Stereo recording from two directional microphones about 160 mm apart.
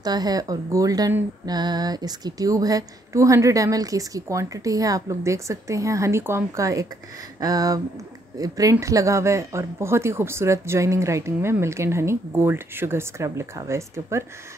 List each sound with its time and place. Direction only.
0.0 s speech: 25° right (ahead or behind)